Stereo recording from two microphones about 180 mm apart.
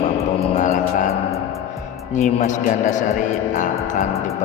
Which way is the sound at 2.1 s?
40° left (ahead or behind).